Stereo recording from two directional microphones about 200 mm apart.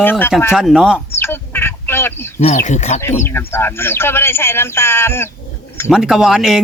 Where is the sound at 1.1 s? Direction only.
10° left (ahead or behind).